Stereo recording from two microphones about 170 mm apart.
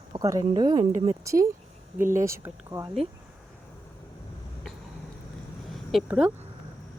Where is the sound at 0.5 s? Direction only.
25° right (ahead or behind).